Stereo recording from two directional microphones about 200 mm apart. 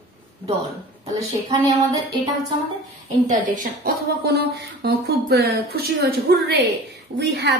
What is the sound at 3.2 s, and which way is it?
A woman's voice, 40° right (ahead or behind).